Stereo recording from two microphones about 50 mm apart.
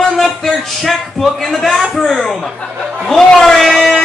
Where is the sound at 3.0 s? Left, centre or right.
Centre.